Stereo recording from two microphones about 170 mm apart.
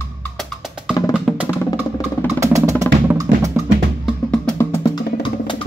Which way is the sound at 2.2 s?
15° right (ahead or behind).